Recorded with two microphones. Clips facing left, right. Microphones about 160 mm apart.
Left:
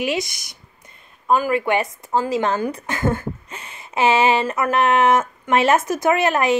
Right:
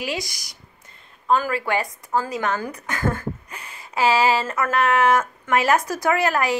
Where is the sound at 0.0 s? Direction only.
20° left (ahead or behind).